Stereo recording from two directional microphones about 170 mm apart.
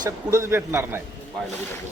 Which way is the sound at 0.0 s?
15° right (ahead or behind).